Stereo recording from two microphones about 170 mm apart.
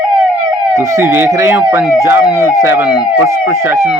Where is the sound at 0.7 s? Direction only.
15° right (ahead or behind).